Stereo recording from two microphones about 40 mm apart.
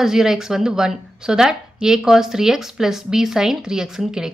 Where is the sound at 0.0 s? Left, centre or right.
Centre.